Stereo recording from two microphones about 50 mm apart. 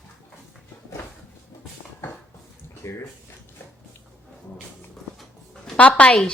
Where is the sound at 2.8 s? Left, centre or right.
Left.